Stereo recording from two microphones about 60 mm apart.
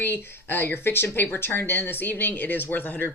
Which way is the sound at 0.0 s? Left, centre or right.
Left.